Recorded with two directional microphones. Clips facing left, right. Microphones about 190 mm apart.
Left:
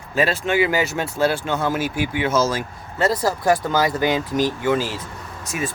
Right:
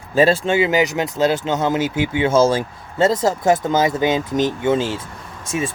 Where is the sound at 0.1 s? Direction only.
30° right (ahead or behind).